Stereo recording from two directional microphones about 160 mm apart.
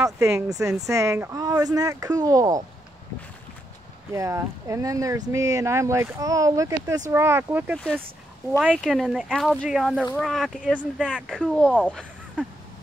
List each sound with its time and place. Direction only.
0.0 s speech: 20° right (ahead or behind)
4.1 s speech: 20° right (ahead or behind)
7.7 s speech: 5° left (ahead or behind)